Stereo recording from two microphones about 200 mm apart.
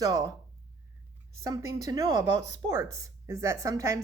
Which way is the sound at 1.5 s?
15° right (ahead or behind).